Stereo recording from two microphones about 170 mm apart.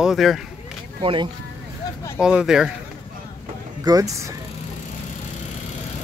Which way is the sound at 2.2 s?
5° right (ahead or behind).